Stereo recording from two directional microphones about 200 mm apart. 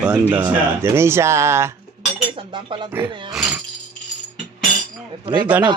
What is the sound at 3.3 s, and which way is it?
Speech, 5° right (ahead or behind).